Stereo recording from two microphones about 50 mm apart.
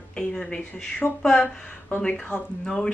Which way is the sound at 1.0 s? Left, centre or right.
Left.